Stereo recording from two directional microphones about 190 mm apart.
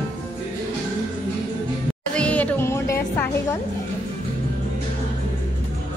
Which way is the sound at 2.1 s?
5° left (ahead or behind).